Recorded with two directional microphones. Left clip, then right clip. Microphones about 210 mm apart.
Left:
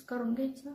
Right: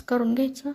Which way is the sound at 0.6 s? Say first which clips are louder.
Right 12 dB; 45° right (ahead or behind).